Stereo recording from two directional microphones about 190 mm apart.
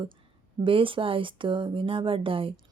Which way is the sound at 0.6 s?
25° right (ahead or behind).